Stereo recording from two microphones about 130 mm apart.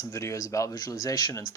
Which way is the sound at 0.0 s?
25° left (ahead or behind).